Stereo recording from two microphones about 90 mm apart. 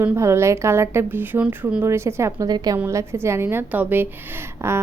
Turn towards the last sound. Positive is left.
turn(degrees=-25)  # may be behind; listen again after turning